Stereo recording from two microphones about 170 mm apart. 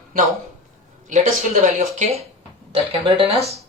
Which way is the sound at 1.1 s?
45° right (ahead or behind).